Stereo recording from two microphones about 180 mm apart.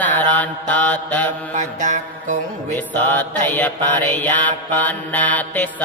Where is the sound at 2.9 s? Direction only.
10° left (ahead or behind).